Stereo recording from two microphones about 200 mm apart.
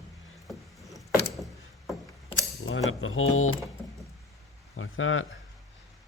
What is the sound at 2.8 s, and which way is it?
Speech, 90° left.